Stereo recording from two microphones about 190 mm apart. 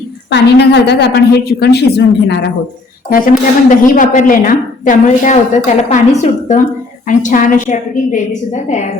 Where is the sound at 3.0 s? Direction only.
50° left (ahead or behind).